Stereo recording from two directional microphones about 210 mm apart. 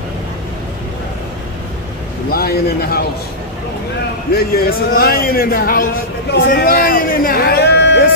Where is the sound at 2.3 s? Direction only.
45° left (ahead or behind).